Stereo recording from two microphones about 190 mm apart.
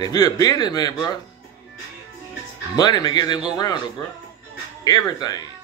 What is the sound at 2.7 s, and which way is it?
Speech, 20° left (ahead or behind).